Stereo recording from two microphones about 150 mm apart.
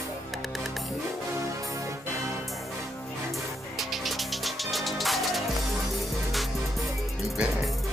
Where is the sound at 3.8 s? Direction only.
Centre (ahead or behind).